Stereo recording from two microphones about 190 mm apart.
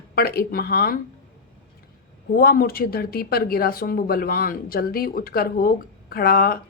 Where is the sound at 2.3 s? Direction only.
50° left (ahead or behind).